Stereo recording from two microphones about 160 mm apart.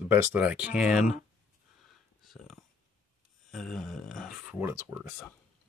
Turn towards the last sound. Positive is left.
turn(degrees=-15)  # may be behind; listen again after turning